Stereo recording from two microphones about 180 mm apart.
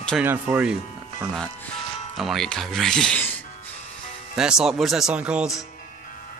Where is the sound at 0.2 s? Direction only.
10° right (ahead or behind).